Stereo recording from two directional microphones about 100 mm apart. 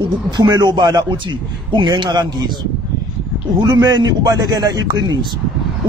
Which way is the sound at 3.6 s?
45° right (ahead or behind).